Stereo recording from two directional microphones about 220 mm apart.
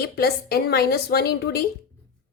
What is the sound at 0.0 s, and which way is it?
A woman's voice, 45° left (ahead or behind).